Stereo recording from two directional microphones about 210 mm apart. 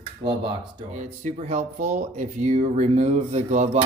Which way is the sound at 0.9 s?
35° right (ahead or behind).